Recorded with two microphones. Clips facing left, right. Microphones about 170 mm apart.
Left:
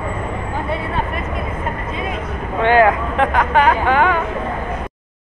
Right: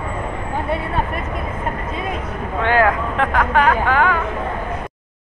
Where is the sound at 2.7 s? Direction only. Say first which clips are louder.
Left 3 dB; 15° left (ahead or behind).